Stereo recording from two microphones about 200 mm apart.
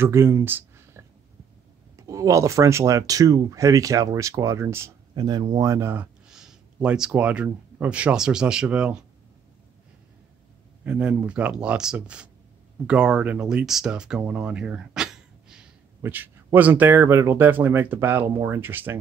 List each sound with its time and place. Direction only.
0.0 s speech: 15° right (ahead or behind)
10.8 s speech: 5° right (ahead or behind)